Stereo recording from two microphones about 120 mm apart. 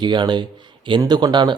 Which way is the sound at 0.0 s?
40° right (ahead or behind).